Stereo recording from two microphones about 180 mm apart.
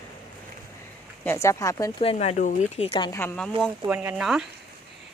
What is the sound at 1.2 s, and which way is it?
Speech, 15° left (ahead or behind).